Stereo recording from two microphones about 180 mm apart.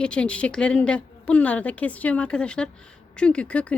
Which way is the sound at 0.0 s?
5° left (ahead or behind).